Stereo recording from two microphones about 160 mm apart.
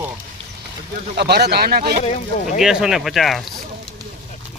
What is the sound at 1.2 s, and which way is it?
Speech, 90° right.